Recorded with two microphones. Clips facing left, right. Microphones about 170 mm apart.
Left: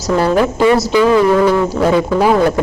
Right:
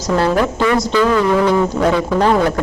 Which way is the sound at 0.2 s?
20° left (ahead or behind).